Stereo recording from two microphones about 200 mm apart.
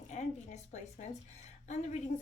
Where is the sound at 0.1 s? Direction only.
35° left (ahead or behind).